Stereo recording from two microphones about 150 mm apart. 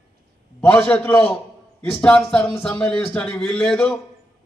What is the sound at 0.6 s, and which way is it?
A man's voice, 15° left (ahead or behind).